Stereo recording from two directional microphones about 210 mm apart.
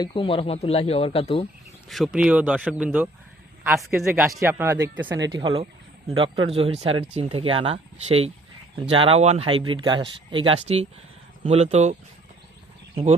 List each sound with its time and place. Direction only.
0.0 s speech: 25° left (ahead or behind)
1.9 s a man's voice: centre (ahead or behind); by 11.9 s 30° right (ahead or behind)